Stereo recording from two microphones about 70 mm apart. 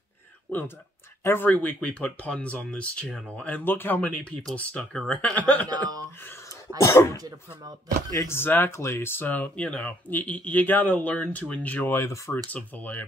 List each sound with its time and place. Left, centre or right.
0.5 s speech: left
6.2 s a sound: left
6.8 s speech: left
8.1 s speech: left
8.4 s speech: left